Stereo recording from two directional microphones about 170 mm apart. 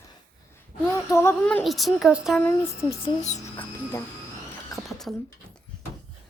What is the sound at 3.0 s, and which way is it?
Speech, 40° left (ahead or behind).